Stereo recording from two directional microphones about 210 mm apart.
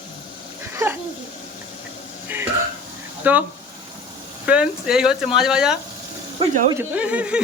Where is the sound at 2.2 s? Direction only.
10° right (ahead or behind).